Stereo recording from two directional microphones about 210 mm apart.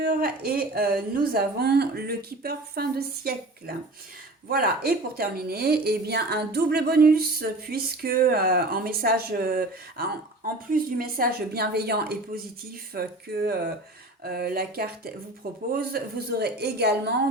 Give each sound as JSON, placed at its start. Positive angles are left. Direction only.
{"t": 0.0, "sound": "a woman's voice", "side_deg": -45}
{"t": 4.4, "sound": "a woman's voice", "side_deg": -45}